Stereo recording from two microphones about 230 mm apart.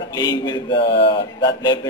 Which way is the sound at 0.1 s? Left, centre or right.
Centre.